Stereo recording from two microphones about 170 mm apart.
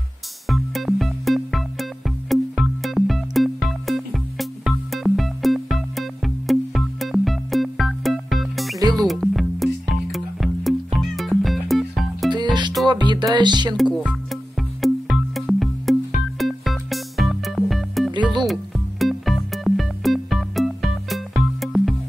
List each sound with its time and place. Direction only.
0.5 s music: centre (ahead or behind)
8.7 s music: 25° right (ahead or behind)
9.0 s music: centre (ahead or behind)
12.3 s music: 25° right (ahead or behind)
13.7 s music: 5° right (ahead or behind)